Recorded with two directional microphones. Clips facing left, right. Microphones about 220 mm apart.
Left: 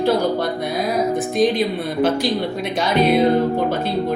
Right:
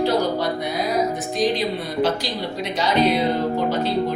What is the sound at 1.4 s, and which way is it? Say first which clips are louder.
Speech: left 3 dB; 55° left (ahead or behind).